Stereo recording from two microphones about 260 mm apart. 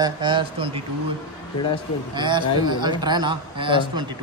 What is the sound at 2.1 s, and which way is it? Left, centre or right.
Speech, centre.